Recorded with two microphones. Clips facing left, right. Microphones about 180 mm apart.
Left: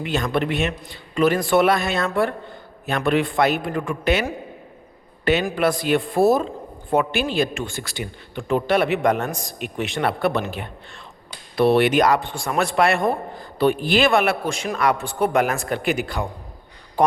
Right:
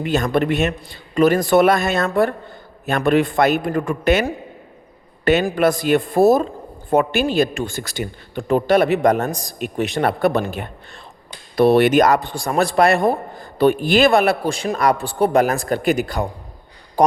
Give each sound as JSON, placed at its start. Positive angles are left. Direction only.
{"t": 0.0, "sound": "a man's voice", "side_deg": -45}